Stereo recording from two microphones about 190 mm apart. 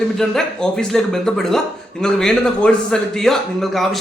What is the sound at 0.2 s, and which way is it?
A man's voice, 5° left (ahead or behind).